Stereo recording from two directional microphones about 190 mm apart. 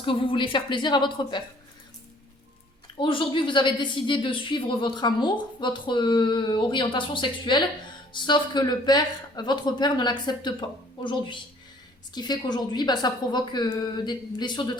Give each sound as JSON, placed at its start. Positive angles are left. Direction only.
{"t": 0.0, "sound": "a woman's voice", "side_deg": 25}
{"t": 3.0, "sound": "a woman's voice", "side_deg": 25}